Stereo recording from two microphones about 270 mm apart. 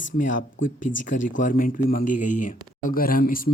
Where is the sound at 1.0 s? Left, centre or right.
Left.